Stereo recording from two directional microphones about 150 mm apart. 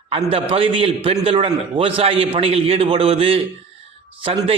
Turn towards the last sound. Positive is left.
turn(degrees=-40)  # may be behind; listen again after turning